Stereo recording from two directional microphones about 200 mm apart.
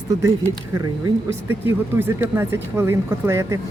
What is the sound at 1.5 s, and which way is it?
A woman's voice, 10° right (ahead or behind).